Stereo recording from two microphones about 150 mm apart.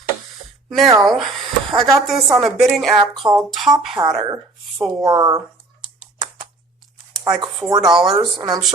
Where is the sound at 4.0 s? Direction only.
25° right (ahead or behind).